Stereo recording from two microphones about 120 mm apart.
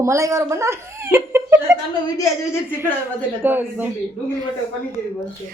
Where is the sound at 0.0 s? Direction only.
25° right (ahead or behind).